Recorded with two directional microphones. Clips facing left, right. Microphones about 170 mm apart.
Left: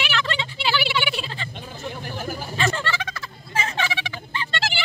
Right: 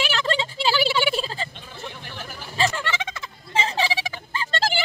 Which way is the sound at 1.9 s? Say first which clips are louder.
Left 8 dB; 45° left (ahead or behind).